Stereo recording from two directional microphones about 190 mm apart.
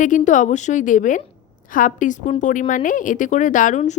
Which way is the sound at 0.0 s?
40° left (ahead or behind).